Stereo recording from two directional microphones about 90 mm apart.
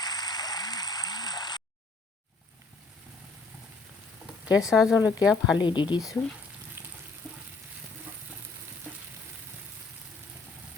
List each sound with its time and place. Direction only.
0.0 s a sound: 50° left (ahead or behind)
4.5 s speech: 5° right (ahead or behind)
5.5 s speech: 60° left (ahead or behind)